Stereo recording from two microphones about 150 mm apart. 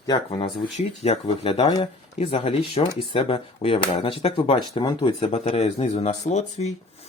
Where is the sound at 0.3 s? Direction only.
40° left (ahead or behind).